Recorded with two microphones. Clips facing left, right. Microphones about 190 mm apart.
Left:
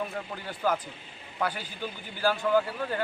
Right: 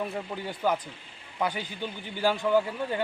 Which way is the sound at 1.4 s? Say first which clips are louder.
Right 1 dB; 20° right (ahead or behind).